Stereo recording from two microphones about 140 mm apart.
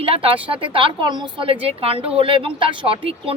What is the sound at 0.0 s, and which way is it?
A woman's voice, 40° right (ahead or behind).